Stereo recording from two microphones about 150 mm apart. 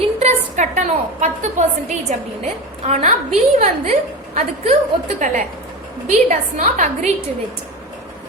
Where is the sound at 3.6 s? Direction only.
50° right (ahead or behind).